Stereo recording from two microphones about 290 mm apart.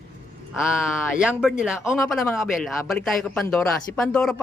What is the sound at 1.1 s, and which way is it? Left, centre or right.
Speech, centre.